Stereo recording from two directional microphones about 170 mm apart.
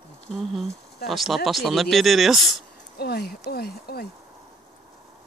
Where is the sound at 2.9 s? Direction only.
65° left (ahead or behind).